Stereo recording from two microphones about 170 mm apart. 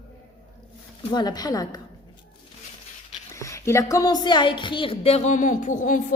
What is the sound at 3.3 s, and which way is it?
A woman's voice, 15° left (ahead or behind).